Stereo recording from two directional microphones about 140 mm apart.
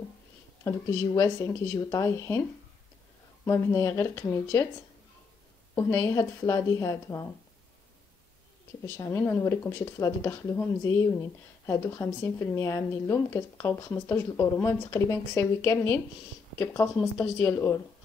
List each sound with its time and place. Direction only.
0.7 s speech: 20° left (ahead or behind)
3.4 s speech: 20° left (ahead or behind)
5.8 s speech: 15° left (ahead or behind)
8.8 s speech: 20° left (ahead or behind)